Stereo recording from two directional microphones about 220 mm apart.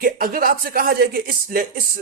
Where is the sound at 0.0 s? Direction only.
40° right (ahead or behind).